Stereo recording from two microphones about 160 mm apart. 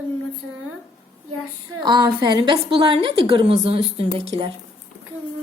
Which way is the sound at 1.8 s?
25° right (ahead or behind).